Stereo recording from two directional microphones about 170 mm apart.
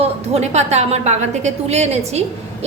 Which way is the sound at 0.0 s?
40° right (ahead or behind).